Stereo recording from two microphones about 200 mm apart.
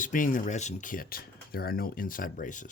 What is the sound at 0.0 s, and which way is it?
Speech, 40° left (ahead or behind).